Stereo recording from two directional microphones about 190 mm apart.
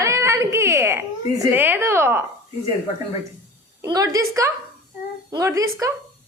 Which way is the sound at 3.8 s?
20° right (ahead or behind).